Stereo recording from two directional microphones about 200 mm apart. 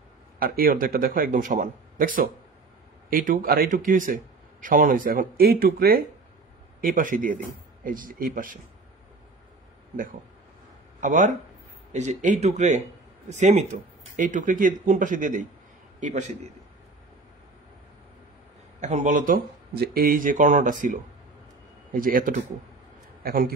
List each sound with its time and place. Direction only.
0.4 s a man's voice: 45° right (ahead or behind)
11.0 s a man's voice: 40° right (ahead or behind)
18.8 s a man's voice: 35° right (ahead or behind)